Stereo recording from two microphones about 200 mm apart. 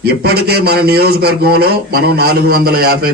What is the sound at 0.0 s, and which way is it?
A man's voice, 50° right (ahead or behind).